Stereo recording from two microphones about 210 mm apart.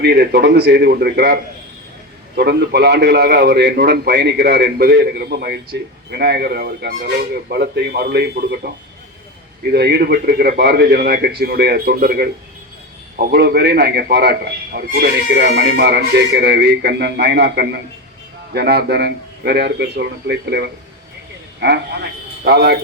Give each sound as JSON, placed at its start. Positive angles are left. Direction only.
{"t": 0.0, "sound": "a man's voice", "side_deg": -50}
{"t": 22.4, "sound": "a man's voice", "side_deg": -50}